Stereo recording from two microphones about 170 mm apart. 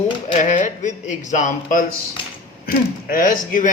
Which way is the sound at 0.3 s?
45° left (ahead or behind).